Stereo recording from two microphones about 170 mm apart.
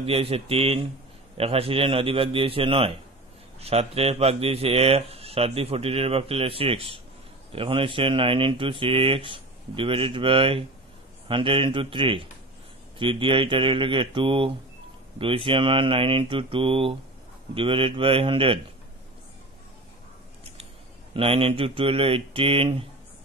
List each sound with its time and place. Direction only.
0.0 s speech: 35° right (ahead or behind)
21.1 s speech: 30° right (ahead or behind)